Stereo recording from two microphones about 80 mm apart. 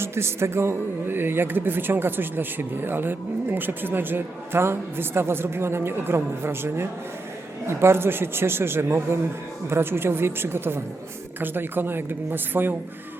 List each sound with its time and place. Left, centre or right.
0.0 s speech: right